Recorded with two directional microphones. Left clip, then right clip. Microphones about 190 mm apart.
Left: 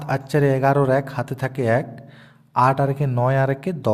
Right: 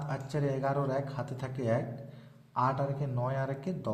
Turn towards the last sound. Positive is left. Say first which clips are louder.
# left 14 dB
turn(degrees=40)  # may be behind; listen again after turning